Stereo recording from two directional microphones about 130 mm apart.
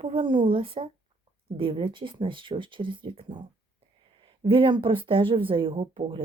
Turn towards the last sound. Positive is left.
turn(degrees=-40)  # may be behind; listen again after turning